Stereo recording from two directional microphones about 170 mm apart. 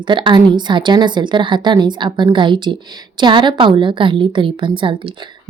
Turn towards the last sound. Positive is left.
turn(degrees=-30)  # may be behind; listen again after turning